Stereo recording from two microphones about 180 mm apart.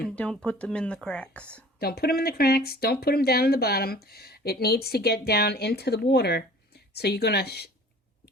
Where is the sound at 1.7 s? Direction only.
60° left (ahead or behind).